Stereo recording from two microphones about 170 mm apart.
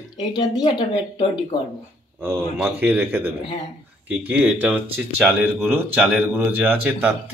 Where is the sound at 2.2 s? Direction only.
15° right (ahead or behind).